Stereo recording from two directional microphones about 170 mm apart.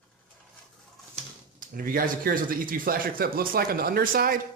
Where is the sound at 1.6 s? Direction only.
55° right (ahead or behind).